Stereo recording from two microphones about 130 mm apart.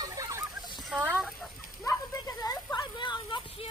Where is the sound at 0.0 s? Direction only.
25° right (ahead or behind).